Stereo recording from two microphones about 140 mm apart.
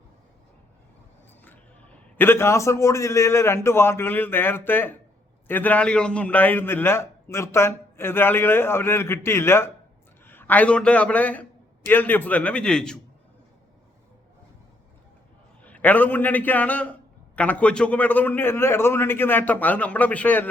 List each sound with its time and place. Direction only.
2.1 s a man's voice: 15° left (ahead or behind)
15.6 s a man's voice: 10° left (ahead or behind)